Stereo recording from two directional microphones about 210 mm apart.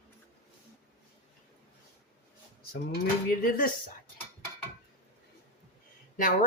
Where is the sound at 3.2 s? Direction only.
45° left (ahead or behind).